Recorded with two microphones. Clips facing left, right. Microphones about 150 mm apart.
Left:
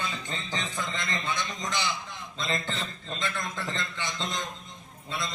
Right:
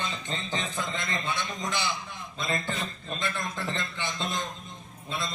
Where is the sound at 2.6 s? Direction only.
15° right (ahead or behind).